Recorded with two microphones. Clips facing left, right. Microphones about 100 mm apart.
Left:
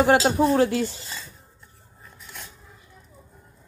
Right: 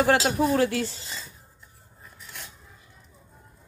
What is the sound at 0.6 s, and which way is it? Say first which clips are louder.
Speech: left 3 dB; 25° left (ahead or behind).